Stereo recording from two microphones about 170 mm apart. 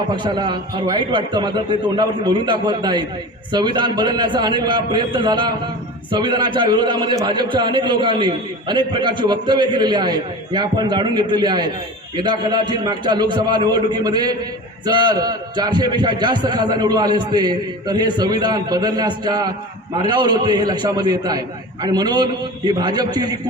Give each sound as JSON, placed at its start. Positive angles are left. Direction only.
{"t": 0.2, "sound": "a man's voice", "side_deg": -25}